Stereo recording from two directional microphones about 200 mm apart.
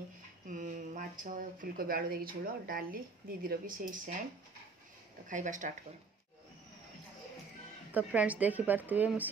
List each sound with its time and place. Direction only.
0.5 s speech: 40° right (ahead or behind)
5.3 s speech: 40° right (ahead or behind)
7.9 s a woman's voice: 5° right (ahead or behind)